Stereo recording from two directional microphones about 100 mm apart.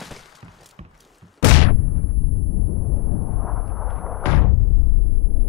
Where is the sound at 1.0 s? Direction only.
Centre (ahead or behind).